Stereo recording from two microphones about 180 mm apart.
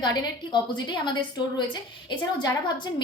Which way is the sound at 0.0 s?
25° left (ahead or behind).